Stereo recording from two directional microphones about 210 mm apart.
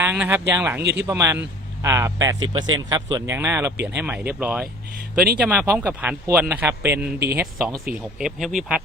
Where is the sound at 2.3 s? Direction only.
70° right (ahead or behind).